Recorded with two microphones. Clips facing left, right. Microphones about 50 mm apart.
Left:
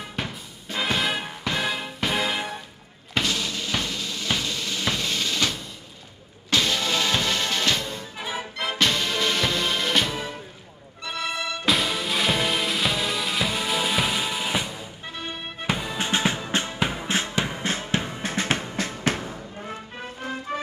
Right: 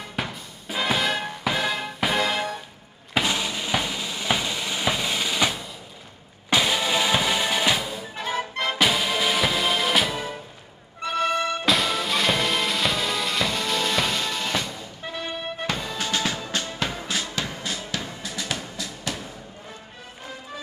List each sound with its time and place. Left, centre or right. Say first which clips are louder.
0.1 s music: right 1 dB; centre
3.2 s drum: right 2 dB; centre
6.5 s music: right 2 dB; centre
8.2 s music: right 4 dB; centre
8.7 s music: right 1 dB; centre
11.0 s music: right 6 dB; right
11.6 s music: right 1 dB; centre
15.6 s music: left 3 dB; centre
16.0 s music: left 3 dB; left
17.1 s music: left 3 dB; left